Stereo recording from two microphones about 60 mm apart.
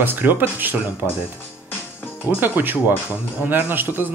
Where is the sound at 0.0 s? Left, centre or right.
Right.